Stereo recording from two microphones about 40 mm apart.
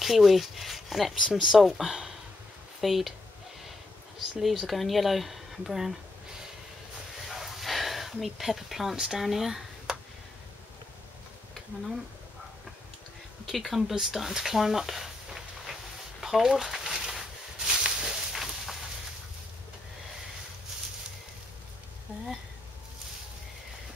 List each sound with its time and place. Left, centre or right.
0.0 s speech: centre
4.4 s speech: centre
7.2 s a sound: centre
8.9 s speech: centre
9.2 s speech: centre
13.5 s speech: centre
16.8 s a sound: centre